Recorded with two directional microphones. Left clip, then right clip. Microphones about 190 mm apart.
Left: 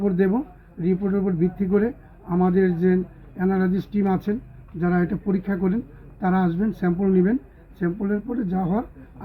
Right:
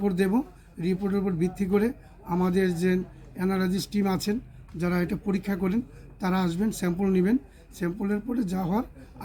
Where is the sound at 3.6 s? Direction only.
20° right (ahead or behind).